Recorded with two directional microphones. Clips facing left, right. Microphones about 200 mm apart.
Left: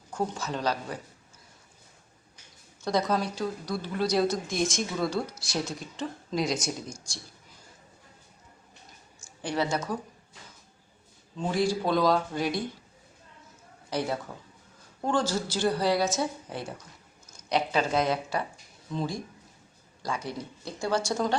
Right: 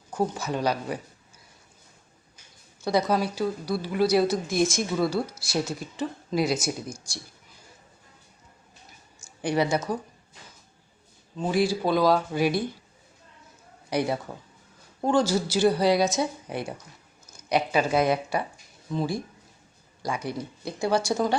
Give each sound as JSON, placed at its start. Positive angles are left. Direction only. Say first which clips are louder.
{"t": 0.1, "sound": "speech", "louder": "right 4 dB", "side_deg": -10}
{"t": 2.8, "sound": "a woman's voice", "louder": "right 3 dB", "side_deg": -5}
{"t": 9.4, "sound": "speech", "louder": "right 4 dB", "side_deg": -10}
{"t": 11.3, "sound": "speech", "louder": "right 3 dB", "side_deg": -5}
{"t": 13.9, "sound": "speech", "louder": "right 4 dB", "side_deg": -10}